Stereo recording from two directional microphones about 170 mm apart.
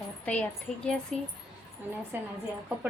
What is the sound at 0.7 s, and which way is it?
Speech, 5° left (ahead or behind).